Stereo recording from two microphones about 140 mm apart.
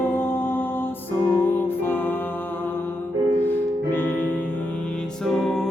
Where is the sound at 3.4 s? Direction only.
15° left (ahead or behind).